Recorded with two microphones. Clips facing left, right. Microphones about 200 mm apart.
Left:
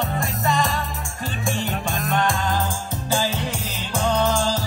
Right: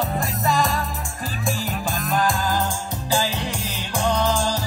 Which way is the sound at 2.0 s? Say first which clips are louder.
Even; centre (ahead or behind).